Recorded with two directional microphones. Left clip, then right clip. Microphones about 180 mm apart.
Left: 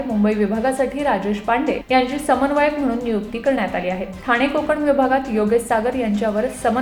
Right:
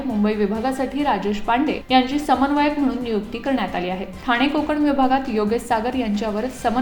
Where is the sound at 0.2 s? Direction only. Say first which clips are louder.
Left 2 dB; 30° right (ahead or behind).